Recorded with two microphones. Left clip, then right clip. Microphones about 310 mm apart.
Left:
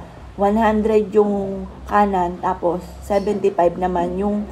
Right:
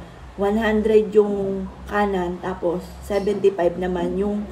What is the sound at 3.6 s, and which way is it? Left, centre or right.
Speech, centre.